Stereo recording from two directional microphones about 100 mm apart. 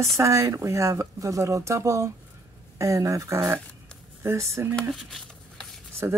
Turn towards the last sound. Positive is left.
turn(degrees=-30)  # may be behind; listen again after turning